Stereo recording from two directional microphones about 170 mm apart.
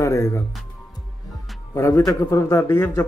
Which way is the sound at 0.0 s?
15° left (ahead or behind).